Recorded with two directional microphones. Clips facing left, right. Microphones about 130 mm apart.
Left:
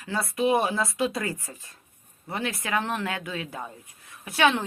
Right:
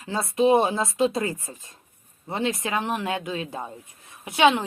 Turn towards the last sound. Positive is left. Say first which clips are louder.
# right 3 dB
turn(degrees=-20)  # may be behind; listen again after turning